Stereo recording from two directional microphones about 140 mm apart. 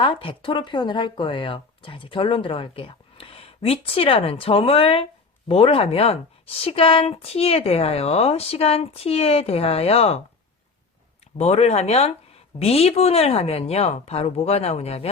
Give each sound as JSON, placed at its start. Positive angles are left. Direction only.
{"t": 0.0, "sound": "speech", "side_deg": 40}
{"t": 11.3, "sound": "speech", "side_deg": 50}